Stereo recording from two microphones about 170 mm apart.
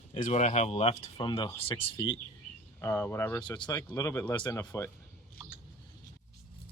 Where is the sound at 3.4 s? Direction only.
25° left (ahead or behind).